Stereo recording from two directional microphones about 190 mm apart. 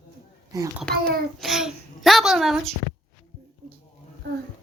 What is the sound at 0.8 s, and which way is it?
A child's voice, centre (ahead or behind).